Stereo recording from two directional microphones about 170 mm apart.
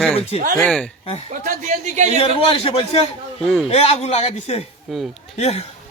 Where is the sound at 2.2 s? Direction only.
35° left (ahead or behind).